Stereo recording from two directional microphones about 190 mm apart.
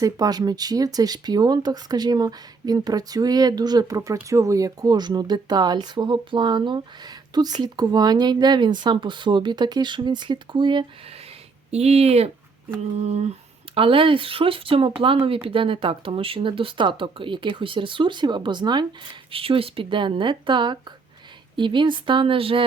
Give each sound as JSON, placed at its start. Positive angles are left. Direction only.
{"t": 0.0, "sound": "speech", "side_deg": -20}